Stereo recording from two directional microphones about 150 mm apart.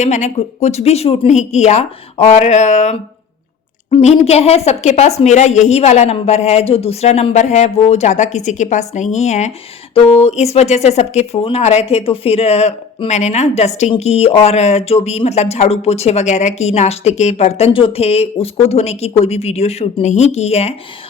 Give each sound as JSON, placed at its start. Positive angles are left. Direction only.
{"t": 0.0, "sound": "speech", "side_deg": 50}